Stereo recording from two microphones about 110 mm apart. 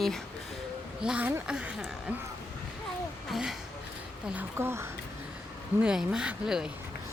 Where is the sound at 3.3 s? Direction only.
5° right (ahead or behind).